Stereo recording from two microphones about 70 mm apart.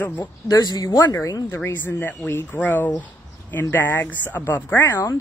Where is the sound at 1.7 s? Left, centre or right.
Left.